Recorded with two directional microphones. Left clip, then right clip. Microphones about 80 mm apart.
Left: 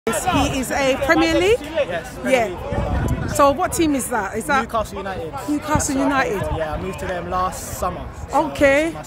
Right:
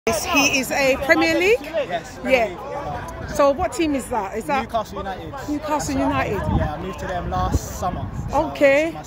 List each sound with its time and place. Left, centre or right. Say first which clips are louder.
0.1 s speech: right 1 dB; left
1.8 s speech: left 2 dB; left
2.2 s speech: even; left
5.7 s speech: left 1 dB; centre
7.2 s speech: left 2 dB; left
8.5 s speech: even; centre